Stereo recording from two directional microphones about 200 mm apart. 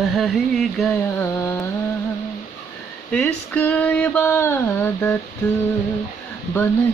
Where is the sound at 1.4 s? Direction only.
15° left (ahead or behind).